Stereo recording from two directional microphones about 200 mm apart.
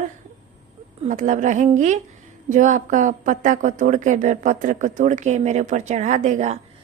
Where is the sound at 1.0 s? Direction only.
40° right (ahead or behind).